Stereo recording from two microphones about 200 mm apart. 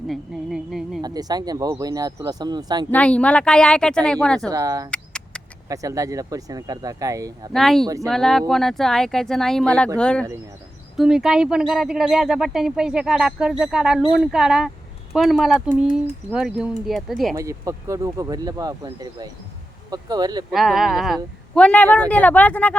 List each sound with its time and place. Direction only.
0.1 s speech: centre (ahead or behind)
1.0 s speech: 20° right (ahead or behind)
2.9 s speech: 5° left (ahead or behind)
4.4 s speech: 15° right (ahead or behind)
4.9 s a sound: 5° left (ahead or behind)
5.6 s speech: 15° right (ahead or behind)
7.5 s speech: centre (ahead or behind)
17.3 s speech: 15° right (ahead or behind)
20.5 s speech: centre (ahead or behind)